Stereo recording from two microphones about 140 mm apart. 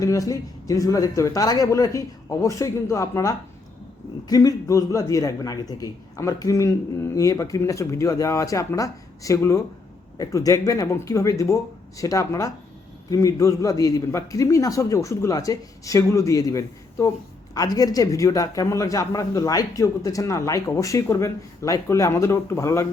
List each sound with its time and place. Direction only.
0.0 s a man's voice: 25° left (ahead or behind)